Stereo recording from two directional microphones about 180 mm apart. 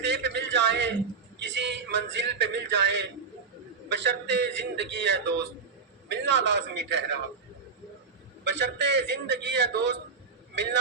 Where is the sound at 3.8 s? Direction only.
75° right (ahead or behind).